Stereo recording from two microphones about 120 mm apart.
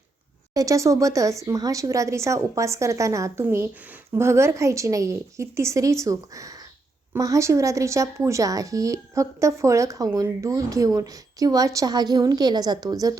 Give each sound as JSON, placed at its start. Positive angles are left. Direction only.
{"t": 0.5, "sound": "a woman's voice", "side_deg": -25}